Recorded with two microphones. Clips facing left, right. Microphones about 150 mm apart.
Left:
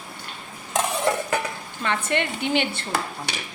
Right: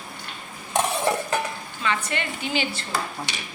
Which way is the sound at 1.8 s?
60° left (ahead or behind).